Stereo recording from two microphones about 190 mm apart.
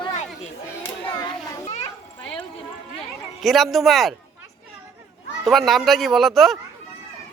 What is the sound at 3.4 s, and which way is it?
Speech, centre (ahead or behind).